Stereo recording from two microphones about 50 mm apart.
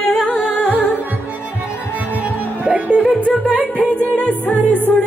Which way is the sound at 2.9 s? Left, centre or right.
Right.